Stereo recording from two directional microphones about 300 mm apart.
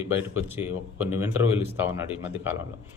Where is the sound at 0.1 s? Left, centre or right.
Centre.